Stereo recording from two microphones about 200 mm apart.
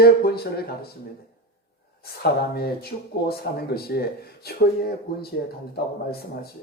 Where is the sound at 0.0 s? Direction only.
50° left (ahead or behind).